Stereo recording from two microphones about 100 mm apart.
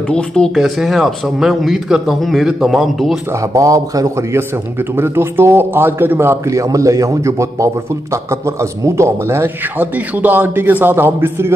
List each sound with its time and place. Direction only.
0.1 s speech: 5° left (ahead or behind)
3.3 s a man's voice: 35° right (ahead or behind)